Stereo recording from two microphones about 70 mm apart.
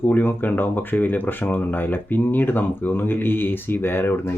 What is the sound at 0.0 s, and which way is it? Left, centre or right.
Speech, left.